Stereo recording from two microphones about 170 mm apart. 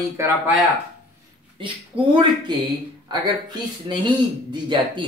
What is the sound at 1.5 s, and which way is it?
Speech, 30° right (ahead or behind).